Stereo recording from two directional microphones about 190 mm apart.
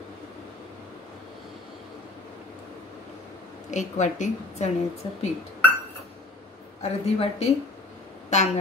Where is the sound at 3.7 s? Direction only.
40° left (ahead or behind).